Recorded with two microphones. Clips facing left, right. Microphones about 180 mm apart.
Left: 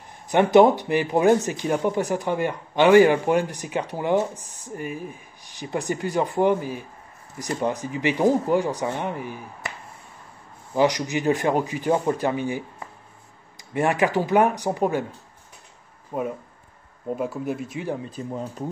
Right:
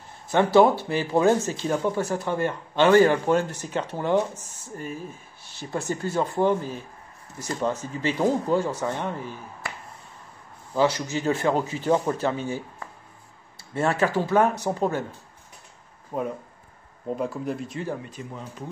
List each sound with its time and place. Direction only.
0.3 s speech: 20° left (ahead or behind)
10.7 s speech: 15° left (ahead or behind)
16.1 s speech: 5° left (ahead or behind)
18.0 s speech: 35° left (ahead or behind)